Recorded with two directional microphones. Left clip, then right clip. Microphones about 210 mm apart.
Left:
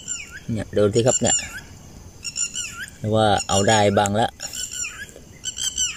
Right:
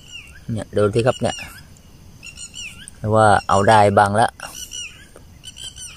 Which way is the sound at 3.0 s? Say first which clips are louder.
Right 5 dB; centre (ahead or behind).